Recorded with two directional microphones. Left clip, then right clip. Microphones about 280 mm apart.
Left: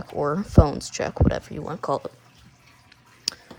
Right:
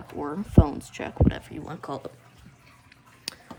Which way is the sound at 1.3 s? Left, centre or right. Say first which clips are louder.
Left 7 dB; centre.